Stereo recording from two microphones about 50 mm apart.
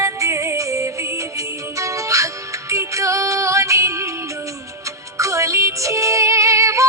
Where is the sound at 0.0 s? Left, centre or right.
Right.